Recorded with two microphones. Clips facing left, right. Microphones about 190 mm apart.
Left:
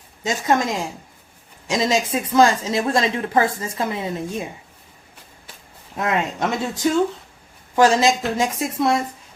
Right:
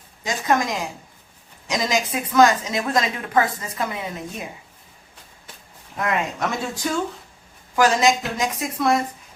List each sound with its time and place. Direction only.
0.2 s a woman's voice: 25° left (ahead or behind)
6.0 s a woman's voice: 25° left (ahead or behind)